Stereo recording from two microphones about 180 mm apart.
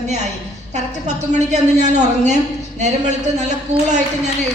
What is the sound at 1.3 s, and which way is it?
Speech, 40° right (ahead or behind).